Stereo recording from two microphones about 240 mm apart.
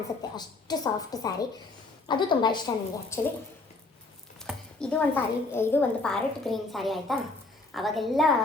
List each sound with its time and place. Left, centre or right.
0.3 s a woman's voice: centre
4.4 s a child's voice: centre